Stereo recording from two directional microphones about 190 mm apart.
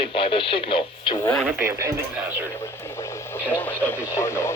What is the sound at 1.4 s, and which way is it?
Speech, 10° right (ahead or behind).